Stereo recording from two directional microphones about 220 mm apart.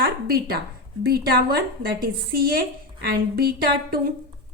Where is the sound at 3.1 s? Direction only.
45° right (ahead or behind).